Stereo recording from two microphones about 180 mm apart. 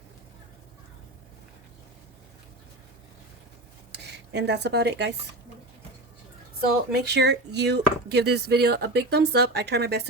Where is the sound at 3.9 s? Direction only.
70° right (ahead or behind).